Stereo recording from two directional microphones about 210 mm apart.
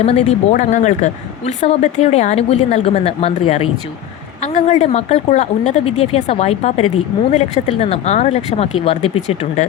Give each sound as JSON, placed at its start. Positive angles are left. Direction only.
{"t": 0.0, "sound": "a woman's voice", "side_deg": 30}